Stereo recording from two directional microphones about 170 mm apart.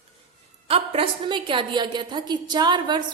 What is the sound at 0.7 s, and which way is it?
A woman's voice, 30° right (ahead or behind).